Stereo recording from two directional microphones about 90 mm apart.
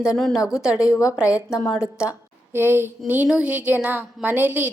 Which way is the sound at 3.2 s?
10° right (ahead or behind).